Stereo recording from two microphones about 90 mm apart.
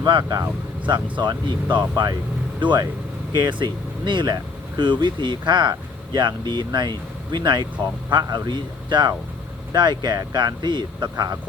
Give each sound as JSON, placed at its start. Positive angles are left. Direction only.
{"t": 0.0, "sound": "a man's voice", "side_deg": -55}